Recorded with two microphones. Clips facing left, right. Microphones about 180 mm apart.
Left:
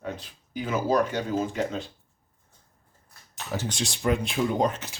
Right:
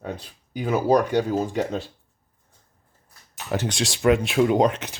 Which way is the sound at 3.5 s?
75° right (ahead or behind).